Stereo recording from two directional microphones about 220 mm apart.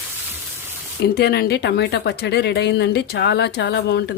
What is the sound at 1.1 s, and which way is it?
Speech, 45° left (ahead or behind).